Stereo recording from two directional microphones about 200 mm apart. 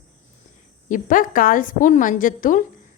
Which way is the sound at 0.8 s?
40° left (ahead or behind).